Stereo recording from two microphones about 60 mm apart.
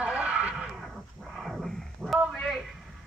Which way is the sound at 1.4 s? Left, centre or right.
Centre.